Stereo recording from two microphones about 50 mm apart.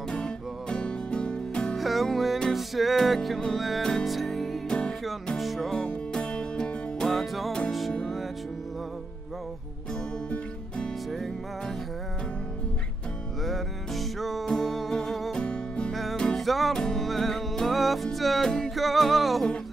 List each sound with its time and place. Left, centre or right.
0.1 s music: centre
1.8 s music: centre
4.6 s music: centre
5.4 s music: centre
5.9 s music: centre
7.1 s music: centre
13.4 s music: centre
15.3 s music: centre
15.9 s music: centre